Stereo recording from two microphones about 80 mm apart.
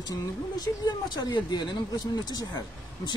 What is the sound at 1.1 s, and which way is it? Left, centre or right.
Speech, left.